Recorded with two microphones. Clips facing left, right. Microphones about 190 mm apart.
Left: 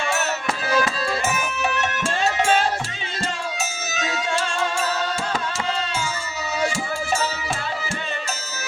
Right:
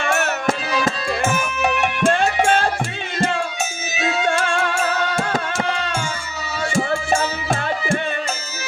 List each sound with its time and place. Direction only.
0.1 s music: 55° right (ahead or behind)
4.3 s music: 55° right (ahead or behind)